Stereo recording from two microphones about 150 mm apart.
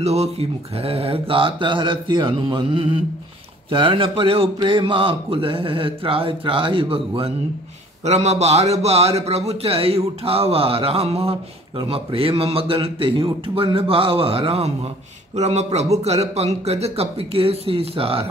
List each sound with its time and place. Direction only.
0.0 s a man's voice: 45° right (ahead or behind)